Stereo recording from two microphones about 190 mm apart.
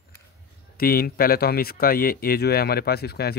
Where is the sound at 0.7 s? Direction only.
55° left (ahead or behind).